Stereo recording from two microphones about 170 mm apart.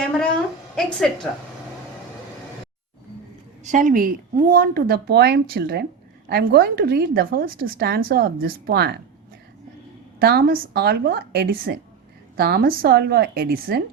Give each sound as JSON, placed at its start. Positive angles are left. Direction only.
{"t": 0.8, "sound": "a woman's voice", "side_deg": 5}
{"t": 3.6, "sound": "a woman's voice", "side_deg": -45}
{"t": 10.2, "sound": "a woman's voice", "side_deg": -60}